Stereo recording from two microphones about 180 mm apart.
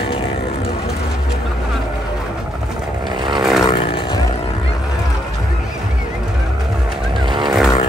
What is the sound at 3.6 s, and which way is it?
Vehicle, 30° left (ahead or behind).